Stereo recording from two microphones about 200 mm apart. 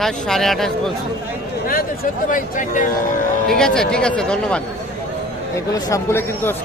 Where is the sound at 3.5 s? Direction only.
5° left (ahead or behind).